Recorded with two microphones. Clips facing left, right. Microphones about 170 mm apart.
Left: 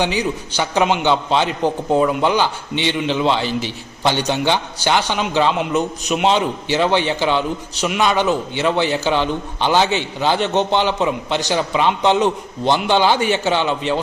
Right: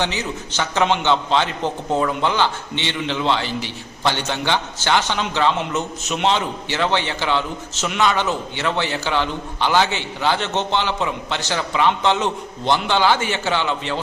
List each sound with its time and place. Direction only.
0.0 s a man's voice: 15° left (ahead or behind)